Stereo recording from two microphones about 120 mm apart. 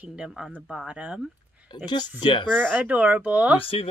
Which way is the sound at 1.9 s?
40° left (ahead or behind).